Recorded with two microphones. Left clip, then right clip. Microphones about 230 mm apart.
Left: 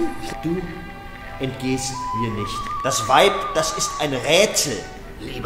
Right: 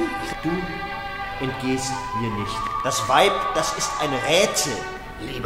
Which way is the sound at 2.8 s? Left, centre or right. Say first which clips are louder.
Left 3 dB; left.